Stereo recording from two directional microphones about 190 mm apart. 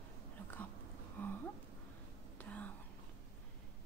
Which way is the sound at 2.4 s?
10° left (ahead or behind).